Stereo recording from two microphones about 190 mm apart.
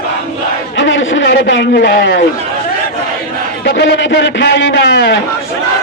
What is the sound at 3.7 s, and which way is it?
A man's voice, 65° left (ahead or behind).